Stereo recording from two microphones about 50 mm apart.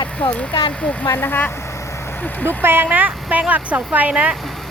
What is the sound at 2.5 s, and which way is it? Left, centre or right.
Speech, right.